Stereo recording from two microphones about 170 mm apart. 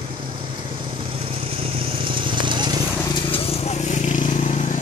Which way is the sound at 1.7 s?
30° right (ahead or behind).